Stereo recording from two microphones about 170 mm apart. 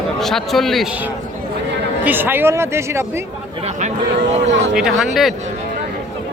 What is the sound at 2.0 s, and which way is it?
Speech, 10° right (ahead or behind).